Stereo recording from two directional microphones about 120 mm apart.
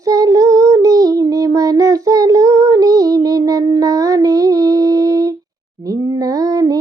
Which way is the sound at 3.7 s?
30° right (ahead or behind).